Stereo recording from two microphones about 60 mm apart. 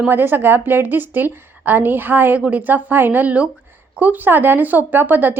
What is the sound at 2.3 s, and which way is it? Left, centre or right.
A woman's voice, right.